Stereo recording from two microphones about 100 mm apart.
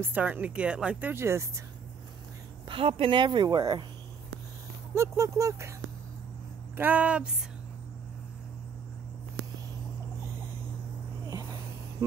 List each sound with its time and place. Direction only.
0.0 s speech: 15° right (ahead or behind)
1.1 s speech: 30° right (ahead or behind)
2.7 s speech: 70° right (ahead or behind); by 3.8 s 45° right (ahead or behind)
4.9 s speech: 30° right (ahead or behind)
6.8 s speech: 15° right (ahead or behind)
11.2 s a sound: 35° right (ahead or behind)